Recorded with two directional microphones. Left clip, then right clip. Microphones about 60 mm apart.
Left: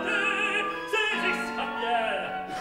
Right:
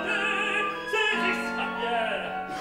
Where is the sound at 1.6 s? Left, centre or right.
Left.